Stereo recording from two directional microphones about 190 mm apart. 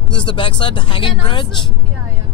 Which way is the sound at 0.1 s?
25° left (ahead or behind).